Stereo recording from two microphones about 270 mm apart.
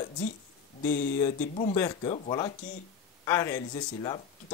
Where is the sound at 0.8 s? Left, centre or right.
Left.